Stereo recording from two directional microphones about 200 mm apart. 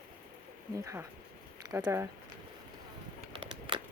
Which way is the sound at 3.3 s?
25° right (ahead or behind).